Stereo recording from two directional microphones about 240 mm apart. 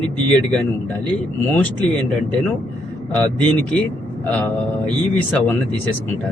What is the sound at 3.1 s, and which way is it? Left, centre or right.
Speech, centre.